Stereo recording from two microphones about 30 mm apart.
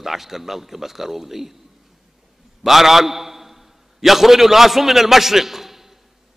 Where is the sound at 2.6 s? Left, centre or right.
Centre.